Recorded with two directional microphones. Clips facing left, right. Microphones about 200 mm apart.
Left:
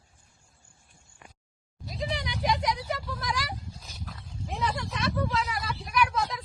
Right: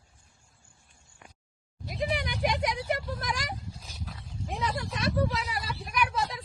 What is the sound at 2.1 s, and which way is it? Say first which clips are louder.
Vehicle: even; 55° right (ahead or behind).